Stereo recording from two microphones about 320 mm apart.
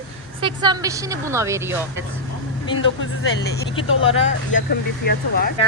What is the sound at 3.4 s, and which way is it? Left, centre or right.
Speech, left.